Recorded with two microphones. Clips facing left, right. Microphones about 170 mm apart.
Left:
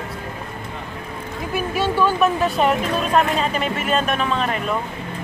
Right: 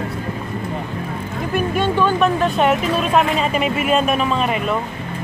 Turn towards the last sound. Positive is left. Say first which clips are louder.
# right 3 dB
turn(degrees=-10)  # may be behind; listen again after turning